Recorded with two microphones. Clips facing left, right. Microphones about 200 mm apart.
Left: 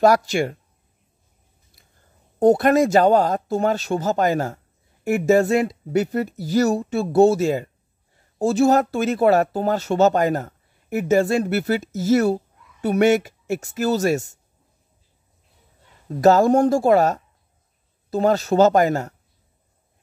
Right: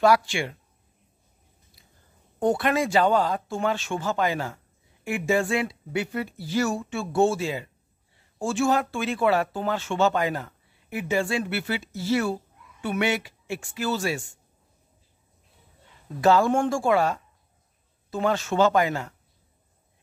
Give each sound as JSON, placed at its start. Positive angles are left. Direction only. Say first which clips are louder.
{"t": 0.0, "sound": "speech", "louder": "left 4 dB", "side_deg": 40}
{"t": 2.3, "sound": "speech", "louder": "left 8 dB", "side_deg": 40}
{"t": 16.2, "sound": "speech", "louder": "left 6 dB", "side_deg": 40}